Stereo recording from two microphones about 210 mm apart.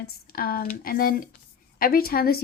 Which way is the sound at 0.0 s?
45° left (ahead or behind).